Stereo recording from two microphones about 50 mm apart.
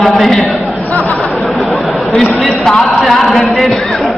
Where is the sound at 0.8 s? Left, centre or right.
Left.